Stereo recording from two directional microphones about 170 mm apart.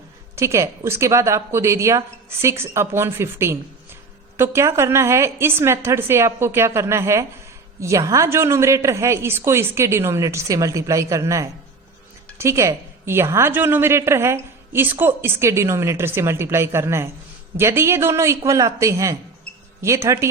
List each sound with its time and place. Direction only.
0.3 s a woman's voice: 15° right (ahead or behind)